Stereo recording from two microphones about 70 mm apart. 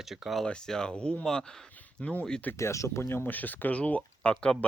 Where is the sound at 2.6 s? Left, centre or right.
Left.